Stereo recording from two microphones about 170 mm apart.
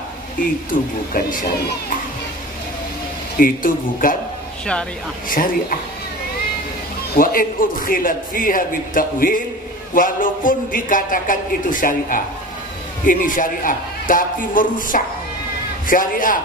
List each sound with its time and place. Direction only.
0.7 s a man's voice: 55° left (ahead or behind)
3.3 s a man's voice: 55° left (ahead or behind)
5.3 s a man's voice: 55° left (ahead or behind)
7.2 s a man's voice: 55° left (ahead or behind)